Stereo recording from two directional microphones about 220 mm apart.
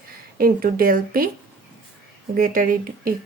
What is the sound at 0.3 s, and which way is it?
Speech, 40° right (ahead or behind).